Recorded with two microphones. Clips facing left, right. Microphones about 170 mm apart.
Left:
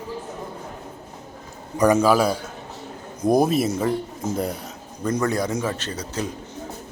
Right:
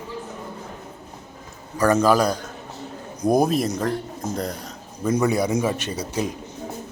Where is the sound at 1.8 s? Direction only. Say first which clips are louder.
Left 1 dB; 10° left (ahead or behind).